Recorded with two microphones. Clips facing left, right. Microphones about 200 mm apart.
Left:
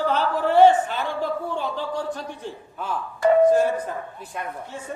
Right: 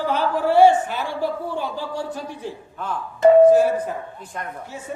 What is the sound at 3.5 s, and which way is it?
Speech, 10° right (ahead or behind).